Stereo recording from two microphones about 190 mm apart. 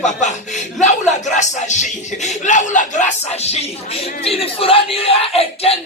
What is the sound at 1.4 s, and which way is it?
Speech, 40° left (ahead or behind).